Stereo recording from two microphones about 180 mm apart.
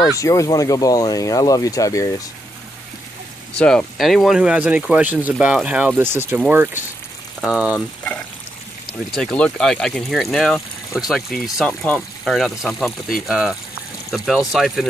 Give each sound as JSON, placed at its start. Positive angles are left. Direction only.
{"t": 0.2, "sound": "speech", "side_deg": 20}
{"t": 3.5, "sound": "speech", "side_deg": 5}
{"t": 7.7, "sound": "speech", "side_deg": 5}